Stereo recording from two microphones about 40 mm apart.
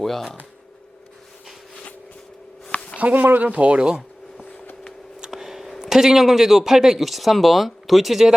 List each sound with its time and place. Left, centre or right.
0.0 s speech: centre
3.0 s speech: right
5.2 s a sound: centre
5.8 s speech: centre